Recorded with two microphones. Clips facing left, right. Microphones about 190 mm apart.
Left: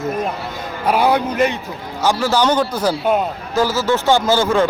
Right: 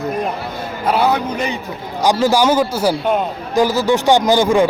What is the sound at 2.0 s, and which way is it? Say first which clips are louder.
Speech: right 3 dB; 15° right (ahead or behind).